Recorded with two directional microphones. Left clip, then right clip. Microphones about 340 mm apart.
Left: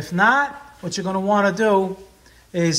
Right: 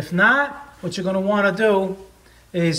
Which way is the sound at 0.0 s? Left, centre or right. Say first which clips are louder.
Even; centre.